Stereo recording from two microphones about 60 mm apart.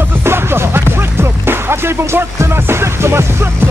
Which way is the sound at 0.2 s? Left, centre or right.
Right.